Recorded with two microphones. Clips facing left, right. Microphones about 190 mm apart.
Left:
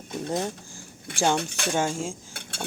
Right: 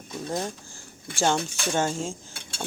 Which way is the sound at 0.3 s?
20° left (ahead or behind).